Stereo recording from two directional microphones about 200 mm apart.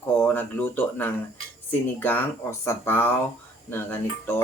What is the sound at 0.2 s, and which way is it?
Speech, 10° left (ahead or behind).